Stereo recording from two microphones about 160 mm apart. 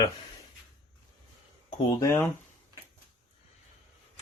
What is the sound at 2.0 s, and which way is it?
Speech, 20° left (ahead or behind).